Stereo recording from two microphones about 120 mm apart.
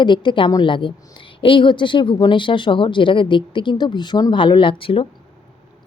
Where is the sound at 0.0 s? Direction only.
40° left (ahead or behind).